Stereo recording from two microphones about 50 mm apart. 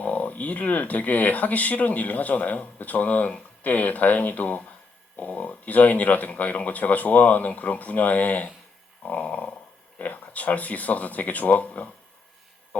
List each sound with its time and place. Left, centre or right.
0.0 s speech: left
9.0 s dog: left
10.0 s speech: left